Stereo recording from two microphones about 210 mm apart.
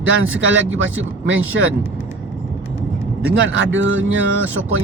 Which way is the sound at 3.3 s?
60° right (ahead or behind).